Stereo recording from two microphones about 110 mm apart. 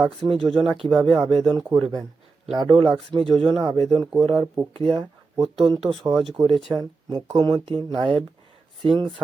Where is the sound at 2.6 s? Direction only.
50° right (ahead or behind).